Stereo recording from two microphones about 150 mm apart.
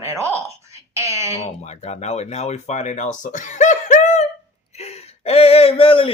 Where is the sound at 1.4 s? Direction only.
45° left (ahead or behind).